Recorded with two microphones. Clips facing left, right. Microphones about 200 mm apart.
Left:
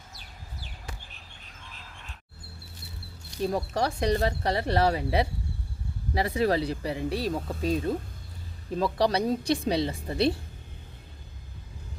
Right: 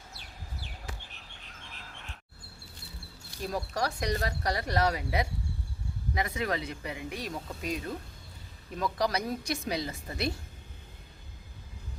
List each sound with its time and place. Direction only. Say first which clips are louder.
3.4 s speech: left 5 dB; 25° left (ahead or behind)